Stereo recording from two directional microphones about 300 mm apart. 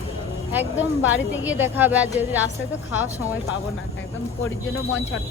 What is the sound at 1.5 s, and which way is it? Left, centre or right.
Speech, centre.